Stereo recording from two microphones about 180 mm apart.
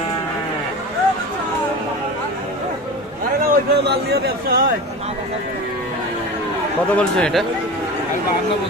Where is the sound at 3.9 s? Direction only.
60° right (ahead or behind).